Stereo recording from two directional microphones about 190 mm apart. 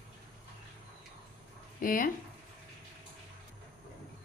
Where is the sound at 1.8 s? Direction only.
50° left (ahead or behind).